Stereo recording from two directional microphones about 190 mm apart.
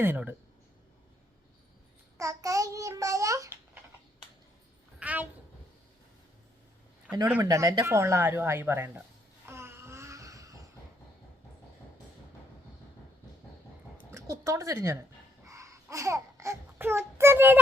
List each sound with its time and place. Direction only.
0.0 s speech: 10° right (ahead or behind)
2.1 s a child's voice: 15° right (ahead or behind)
4.9 s a sound: 10° right (ahead or behind)
7.1 s speech: 5° right (ahead or behind)
7.4 s speech: 20° right (ahead or behind)
9.5 s a sound: 15° right (ahead or behind)
14.1 s speech: 15° right (ahead or behind)
15.4 s babbling: 15° right (ahead or behind)